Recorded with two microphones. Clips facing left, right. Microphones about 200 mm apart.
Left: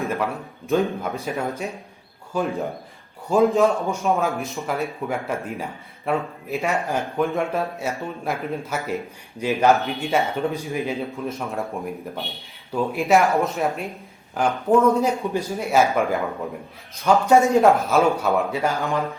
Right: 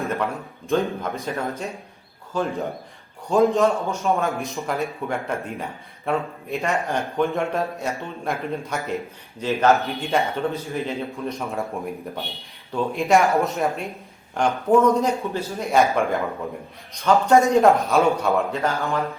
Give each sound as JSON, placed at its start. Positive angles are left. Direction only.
{"t": 0.0, "sound": "a sound", "side_deg": 0}
{"t": 0.7, "sound": "speech", "side_deg": 15}
{"t": 3.2, "sound": "speech", "side_deg": 0}
{"t": 9.8, "sound": "speech", "side_deg": 0}
{"t": 10.4, "sound": "speech", "side_deg": 15}
{"t": 15.7, "sound": "speech", "side_deg": 5}
{"t": 18.5, "sound": "speech", "side_deg": 15}